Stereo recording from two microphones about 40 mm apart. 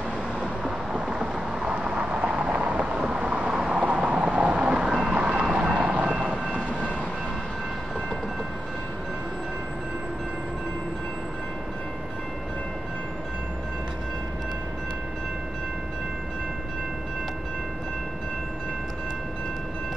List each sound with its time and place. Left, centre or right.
0.7 s vehicle: centre
6.0 s thunder: centre